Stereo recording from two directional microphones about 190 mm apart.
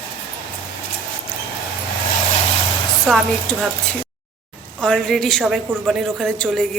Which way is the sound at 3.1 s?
5° right (ahead or behind).